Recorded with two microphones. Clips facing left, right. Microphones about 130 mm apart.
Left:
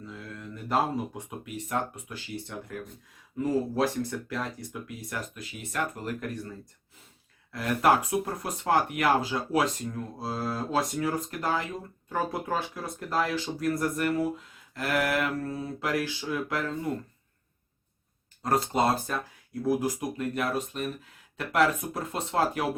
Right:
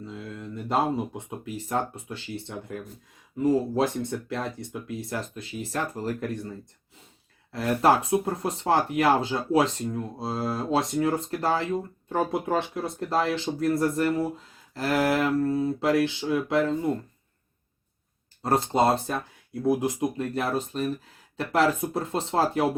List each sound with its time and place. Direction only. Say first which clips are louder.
0.1 s speech: right 3 dB; 25° right (ahead or behind)
4.0 s speech: right 3 dB; 25° right (ahead or behind)
7.5 s speech: right 2 dB; 30° right (ahead or behind)
18.4 s speech: right 3 dB; 30° right (ahead or behind)